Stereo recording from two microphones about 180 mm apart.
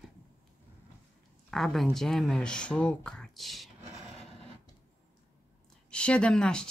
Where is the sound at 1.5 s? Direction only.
Centre (ahead or behind).